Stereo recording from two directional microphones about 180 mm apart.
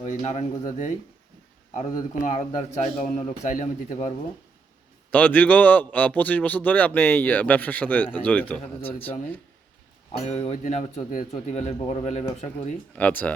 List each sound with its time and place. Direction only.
0.0 s a man's voice: 40° left (ahead or behind)
5.1 s speech: 10° left (ahead or behind)
10.1 s speech: 35° left (ahead or behind)
13.0 s speech: 5° left (ahead or behind)